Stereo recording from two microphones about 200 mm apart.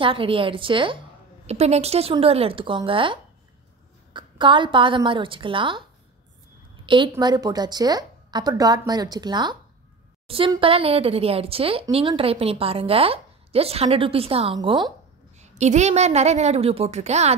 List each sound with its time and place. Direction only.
0.0 s speech: 25° right (ahead or behind)
6.9 s a woman's voice: 20° right (ahead or behind)